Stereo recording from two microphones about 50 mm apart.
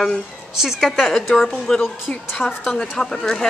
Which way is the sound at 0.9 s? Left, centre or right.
Centre.